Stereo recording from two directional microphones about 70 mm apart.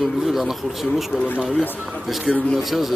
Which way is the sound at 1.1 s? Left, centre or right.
Left.